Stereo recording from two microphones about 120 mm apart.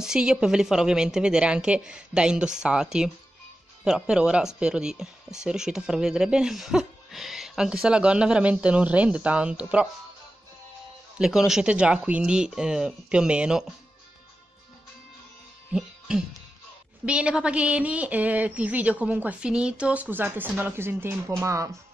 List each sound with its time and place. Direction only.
0.0 s speech: 5° right (ahead or behind)
11.1 s speech: 5° right (ahead or behind)
15.7 s music: 5° right (ahead or behind)
17.0 s speech: 10° right (ahead or behind); by 21.7 s 25° right (ahead or behind)